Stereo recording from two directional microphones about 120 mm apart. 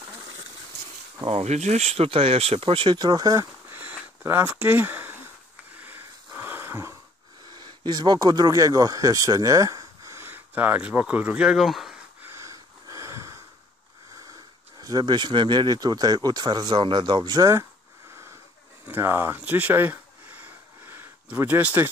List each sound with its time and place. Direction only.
1.2 s speech: 65° right (ahead or behind); by 3.4 s 30° right (ahead or behind)
3.7 s sniff: 15° right (ahead or behind)
5.8 s a sound: 15° right (ahead or behind)
7.6 s speech: 35° right (ahead or behind); by 12.0 s centre (ahead or behind)
12.2 s wheeze: 20° right (ahead or behind)
14.8 s speech: 30° right (ahead or behind)
18.9 s a sound: 20° right (ahead or behind)